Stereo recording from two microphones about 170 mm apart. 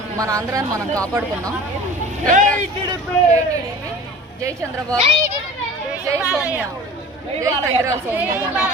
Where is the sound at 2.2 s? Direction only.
50° right (ahead or behind).